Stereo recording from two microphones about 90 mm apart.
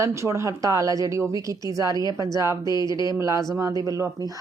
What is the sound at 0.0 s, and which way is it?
Speech, 30° right (ahead or behind).